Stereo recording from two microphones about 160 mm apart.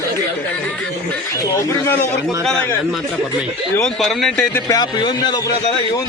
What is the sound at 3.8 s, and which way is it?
Speech, centre (ahead or behind).